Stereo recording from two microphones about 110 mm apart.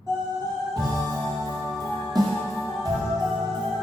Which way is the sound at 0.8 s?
Centre (ahead or behind).